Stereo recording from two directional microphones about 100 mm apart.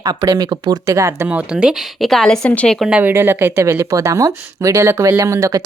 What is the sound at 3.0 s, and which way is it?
Speech, 20° right (ahead or behind).